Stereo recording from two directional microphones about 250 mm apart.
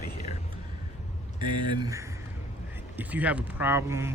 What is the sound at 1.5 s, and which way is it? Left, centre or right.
Speech, centre.